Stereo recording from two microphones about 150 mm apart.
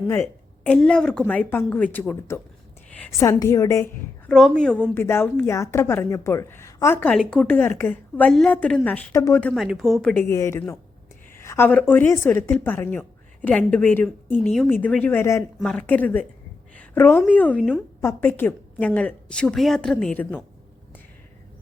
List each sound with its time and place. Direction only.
0.1 s a woman's voice: 10° left (ahead or behind)
3.2 s a woman's voice: 25° left (ahead or behind)
4.3 s a woman's voice: 5° left (ahead or behind)
10.2 s a woman's voice: 20° left (ahead or behind)
15.5 s a woman's voice: 5° left (ahead or behind)
18.0 s a woman's voice: 15° left (ahead or behind)